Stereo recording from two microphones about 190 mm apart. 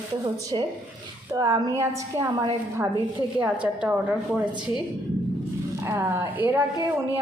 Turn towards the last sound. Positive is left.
turn(degrees=-15)  # may be behind; listen again after turning